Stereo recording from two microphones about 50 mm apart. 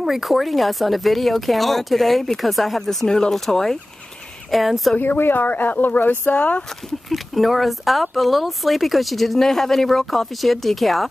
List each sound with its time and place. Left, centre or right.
0.0 s speech: centre
3.1 s speech: centre
5.0 s speech: left
6.3 s speech: left
7.1 s speech: centre